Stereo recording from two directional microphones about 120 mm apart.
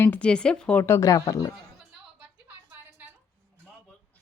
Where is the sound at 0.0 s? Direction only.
10° left (ahead or behind).